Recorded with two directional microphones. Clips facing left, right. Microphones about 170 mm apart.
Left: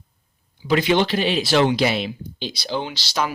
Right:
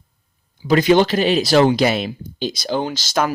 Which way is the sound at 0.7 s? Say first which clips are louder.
Right 5 dB; 40° right (ahead or behind).